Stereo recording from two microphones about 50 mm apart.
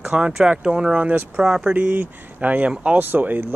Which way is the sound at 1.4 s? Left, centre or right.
Centre.